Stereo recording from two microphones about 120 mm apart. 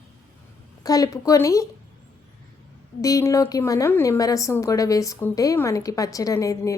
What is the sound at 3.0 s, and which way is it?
A woman's voice, 25° left (ahead or behind).